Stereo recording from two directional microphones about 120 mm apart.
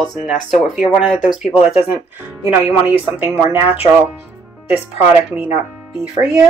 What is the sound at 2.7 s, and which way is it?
Speech, 10° right (ahead or behind).